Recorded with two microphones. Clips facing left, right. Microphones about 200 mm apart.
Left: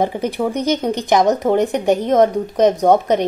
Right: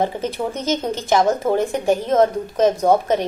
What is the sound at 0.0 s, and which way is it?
Speech, 15° left (ahead or behind).